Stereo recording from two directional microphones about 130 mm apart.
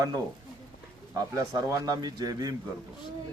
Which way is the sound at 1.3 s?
30° right (ahead or behind).